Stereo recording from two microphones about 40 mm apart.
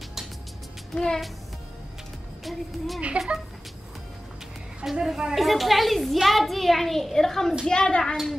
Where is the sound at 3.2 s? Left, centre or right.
Right.